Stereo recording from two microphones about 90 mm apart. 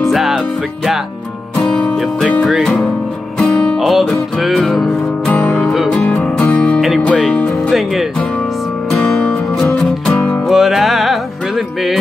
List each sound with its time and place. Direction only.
0.0 s music: 5° right (ahead or behind)
1.6 s music: 5° left (ahead or behind)
3.3 s music: 10° left (ahead or behind)
3.8 s music: centre (ahead or behind)
5.3 s music: 20° left (ahead or behind)
5.6 s music: centre (ahead or behind)
7.7 s music: centre (ahead or behind)
10.0 s music: 5° left (ahead or behind)